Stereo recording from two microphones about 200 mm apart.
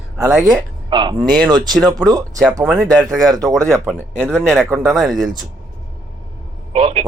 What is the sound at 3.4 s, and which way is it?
Speech, 15° right (ahead or behind).